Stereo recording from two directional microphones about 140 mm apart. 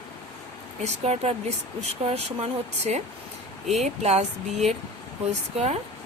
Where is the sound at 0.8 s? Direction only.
50° right (ahead or behind).